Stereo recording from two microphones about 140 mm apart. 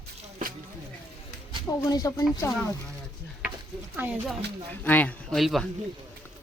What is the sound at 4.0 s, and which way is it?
Speech, 10° right (ahead or behind).